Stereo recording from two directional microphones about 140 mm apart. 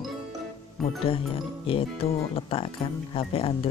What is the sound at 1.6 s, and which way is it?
Speech, 40° left (ahead or behind).